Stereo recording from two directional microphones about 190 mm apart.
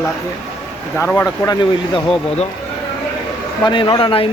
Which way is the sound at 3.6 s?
25° left (ahead or behind).